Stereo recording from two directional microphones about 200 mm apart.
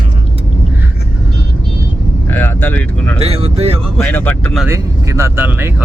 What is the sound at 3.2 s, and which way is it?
Speech, 30° right (ahead or behind).